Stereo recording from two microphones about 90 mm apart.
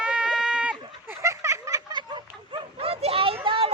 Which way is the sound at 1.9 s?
60° right (ahead or behind).